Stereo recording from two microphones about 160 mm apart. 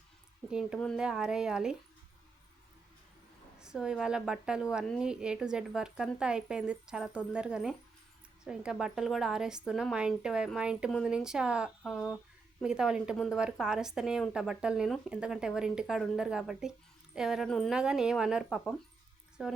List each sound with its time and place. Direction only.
0.5 s speech: 5° right (ahead or behind)
3.6 s speech: 5° right (ahead or behind)